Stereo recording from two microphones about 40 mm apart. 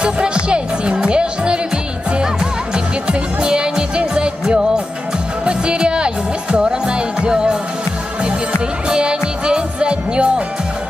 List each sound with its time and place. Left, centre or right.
0.0 s music: right
8.8 s music: centre